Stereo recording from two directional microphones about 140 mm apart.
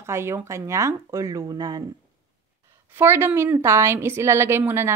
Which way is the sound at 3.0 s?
15° right (ahead or behind).